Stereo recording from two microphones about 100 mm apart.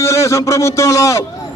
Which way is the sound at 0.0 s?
30° left (ahead or behind).